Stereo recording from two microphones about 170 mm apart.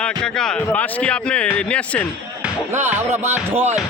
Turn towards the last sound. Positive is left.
turn(degrees=-10)  # may be behind; listen again after turning